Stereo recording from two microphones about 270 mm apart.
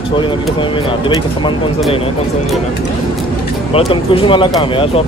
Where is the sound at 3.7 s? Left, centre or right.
Centre.